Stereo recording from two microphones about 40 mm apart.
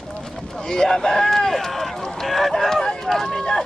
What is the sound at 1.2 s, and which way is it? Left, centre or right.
Run, centre.